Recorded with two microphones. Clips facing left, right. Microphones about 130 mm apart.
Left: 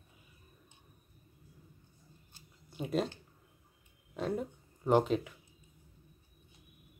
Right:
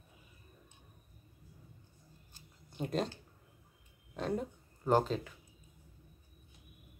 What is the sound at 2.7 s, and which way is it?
Speech, 5° left (ahead or behind).